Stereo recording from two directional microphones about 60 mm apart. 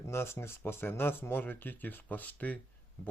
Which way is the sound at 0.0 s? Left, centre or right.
Left.